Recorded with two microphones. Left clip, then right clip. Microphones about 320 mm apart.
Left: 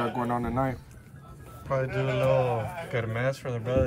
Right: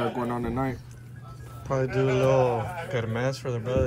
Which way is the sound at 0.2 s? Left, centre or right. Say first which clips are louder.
Left 1 dB; centre.